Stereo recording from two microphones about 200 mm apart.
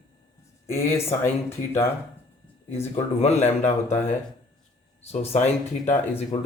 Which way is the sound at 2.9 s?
35° left (ahead or behind).